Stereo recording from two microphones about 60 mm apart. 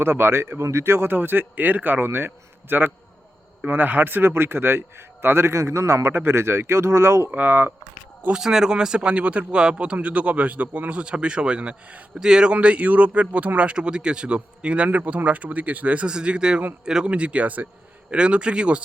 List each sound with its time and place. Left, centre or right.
0.0 s a man's voice: right
7.3 s speech: right
8.3 s speech: centre